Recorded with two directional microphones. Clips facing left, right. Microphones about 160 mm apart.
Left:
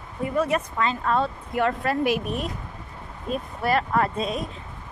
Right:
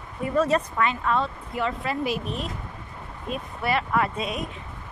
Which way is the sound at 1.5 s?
50° left (ahead or behind).